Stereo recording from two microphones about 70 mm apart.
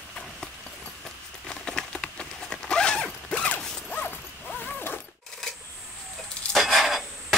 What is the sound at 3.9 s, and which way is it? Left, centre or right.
Dog, left.